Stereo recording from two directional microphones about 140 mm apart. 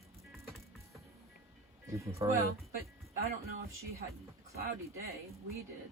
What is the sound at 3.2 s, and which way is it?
Speech, 90° right.